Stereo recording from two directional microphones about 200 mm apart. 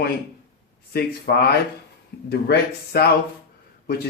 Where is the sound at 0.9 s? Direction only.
50° left (ahead or behind).